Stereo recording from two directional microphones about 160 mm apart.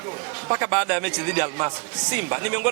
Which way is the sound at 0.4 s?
15° right (ahead or behind).